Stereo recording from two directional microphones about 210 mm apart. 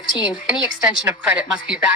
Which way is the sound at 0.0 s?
20° left (ahead or behind).